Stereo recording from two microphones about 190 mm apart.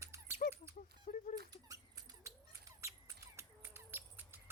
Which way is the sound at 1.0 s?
45° left (ahead or behind).